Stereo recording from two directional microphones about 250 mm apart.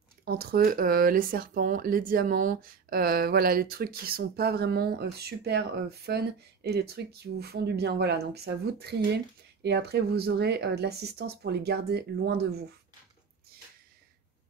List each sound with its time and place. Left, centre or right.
0.2 s speech: right